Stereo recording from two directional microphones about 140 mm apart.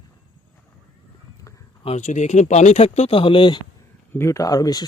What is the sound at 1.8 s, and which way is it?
Speech, 50° left (ahead or behind).